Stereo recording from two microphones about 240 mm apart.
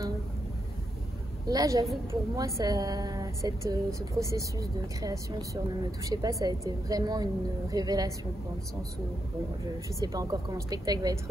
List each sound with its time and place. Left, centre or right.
1.5 s a woman's voice: centre
9.9 s a woman's voice: centre